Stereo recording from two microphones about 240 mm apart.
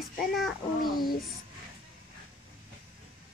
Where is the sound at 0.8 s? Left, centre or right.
Left.